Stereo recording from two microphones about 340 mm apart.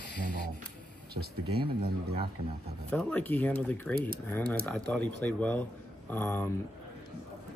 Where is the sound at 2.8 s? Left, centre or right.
Centre.